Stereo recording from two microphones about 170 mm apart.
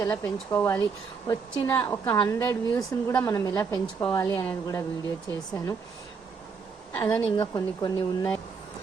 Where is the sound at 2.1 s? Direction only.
25° left (ahead or behind).